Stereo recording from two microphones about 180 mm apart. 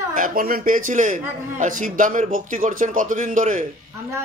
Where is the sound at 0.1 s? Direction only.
50° right (ahead or behind).